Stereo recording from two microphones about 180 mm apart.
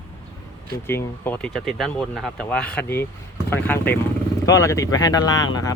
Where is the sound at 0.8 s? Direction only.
15° left (ahead or behind).